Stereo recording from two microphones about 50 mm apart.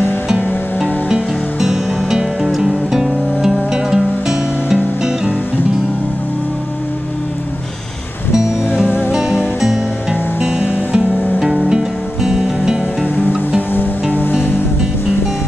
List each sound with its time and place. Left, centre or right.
1.0 s music: centre
9.1 s music: centre
10.4 s music: right
14.1 s music: left